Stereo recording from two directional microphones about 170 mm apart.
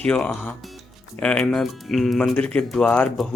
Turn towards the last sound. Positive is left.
turn(degrees=5)  # may be behind; listen again after turning